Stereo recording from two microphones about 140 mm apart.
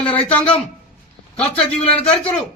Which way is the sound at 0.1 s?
10° left (ahead or behind).